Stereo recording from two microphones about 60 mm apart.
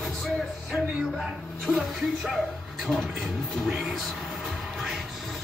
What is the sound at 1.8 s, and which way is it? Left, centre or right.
Speech, centre.